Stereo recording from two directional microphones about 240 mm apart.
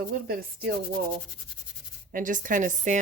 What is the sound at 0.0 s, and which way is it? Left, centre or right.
Rub, right.